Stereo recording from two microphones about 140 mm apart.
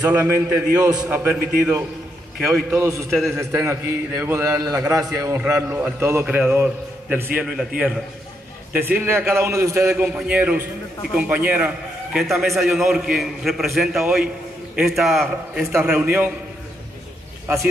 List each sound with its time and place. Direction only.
0.0 s a man's voice: 15° right (ahead or behind)
8.7 s a man's voice: 15° right (ahead or behind)
10.0 s a man's voice: 10° right (ahead or behind)